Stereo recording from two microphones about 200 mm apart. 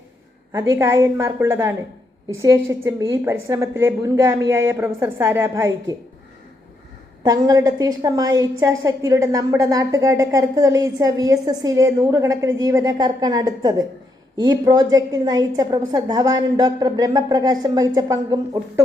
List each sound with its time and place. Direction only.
0.7 s a woman's voice: 10° right (ahead or behind)
7.2 s a woman's voice: 20° right (ahead or behind)